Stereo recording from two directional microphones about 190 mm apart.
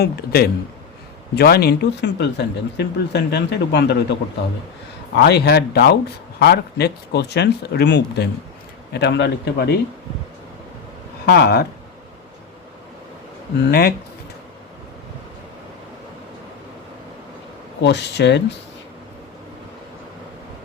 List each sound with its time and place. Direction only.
0.0 s speech: 55° left (ahead or behind)
11.3 s speech: 60° left (ahead or behind)
13.7 s speech: 55° left (ahead or behind)
17.8 s speech: 65° left (ahead or behind)